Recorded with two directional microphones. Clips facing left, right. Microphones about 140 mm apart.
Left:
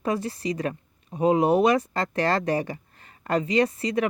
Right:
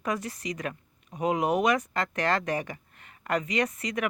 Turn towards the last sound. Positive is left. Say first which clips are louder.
# left 6 dB
turn(degrees=30)  # may be behind; listen again after turning